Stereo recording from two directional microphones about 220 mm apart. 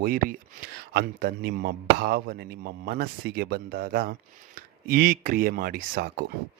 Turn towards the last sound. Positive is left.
turn(degrees=-45)  # may be behind; listen again after turning